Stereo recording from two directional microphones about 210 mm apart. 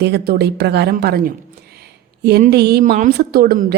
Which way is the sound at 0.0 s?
50° right (ahead or behind).